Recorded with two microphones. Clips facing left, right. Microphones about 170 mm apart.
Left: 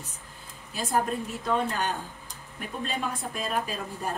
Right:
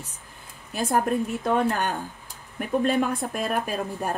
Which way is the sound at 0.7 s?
55° right (ahead or behind).